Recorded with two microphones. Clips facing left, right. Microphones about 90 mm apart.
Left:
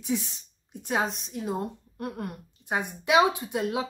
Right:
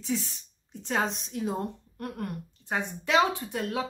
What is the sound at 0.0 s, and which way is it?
Speech, 15° left (ahead or behind).